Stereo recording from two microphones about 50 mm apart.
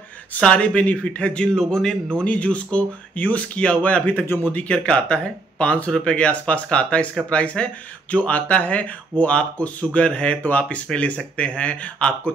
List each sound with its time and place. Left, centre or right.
0.4 s speech: left
2.2 s speech: left